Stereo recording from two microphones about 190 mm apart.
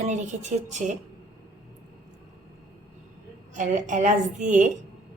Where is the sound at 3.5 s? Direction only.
40° right (ahead or behind).